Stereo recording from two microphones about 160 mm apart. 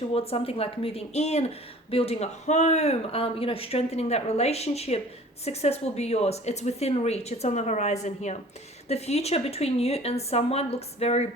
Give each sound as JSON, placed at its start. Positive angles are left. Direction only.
{"t": 0.1, "sound": "speech", "side_deg": 35}